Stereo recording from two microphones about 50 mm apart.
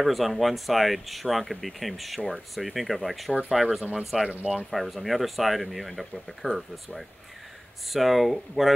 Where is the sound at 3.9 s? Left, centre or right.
Centre.